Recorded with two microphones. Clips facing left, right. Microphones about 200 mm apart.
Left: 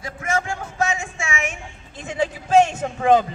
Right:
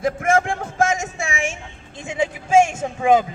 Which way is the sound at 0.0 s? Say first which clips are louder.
Right 7 dB; 50° right (ahead or behind).